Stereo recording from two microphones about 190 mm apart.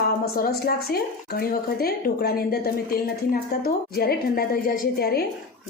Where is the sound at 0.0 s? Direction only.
55° left (ahead or behind).